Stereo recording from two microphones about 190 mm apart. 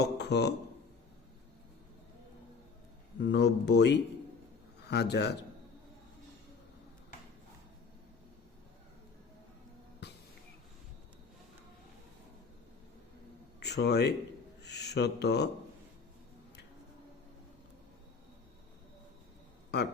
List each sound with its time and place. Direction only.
0.0 s a man's voice: 60° left (ahead or behind)
3.2 s speech: 65° left (ahead or behind)
13.6 s speech: 60° left (ahead or behind)
14.6 s a sound: 60° left (ahead or behind)